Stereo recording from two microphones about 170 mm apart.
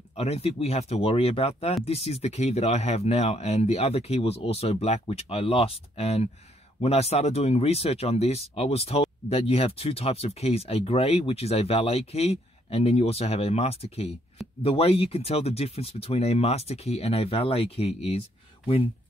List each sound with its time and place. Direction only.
0.1 s speech: 35° left (ahead or behind)